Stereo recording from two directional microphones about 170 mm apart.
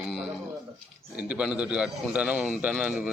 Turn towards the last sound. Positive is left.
turn(degrees=-5)  # may be behind; listen again after turning